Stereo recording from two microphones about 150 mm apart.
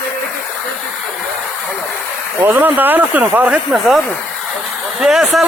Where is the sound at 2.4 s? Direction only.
10° right (ahead or behind).